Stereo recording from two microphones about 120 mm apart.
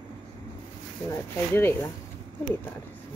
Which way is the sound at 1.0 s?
20° left (ahead or behind).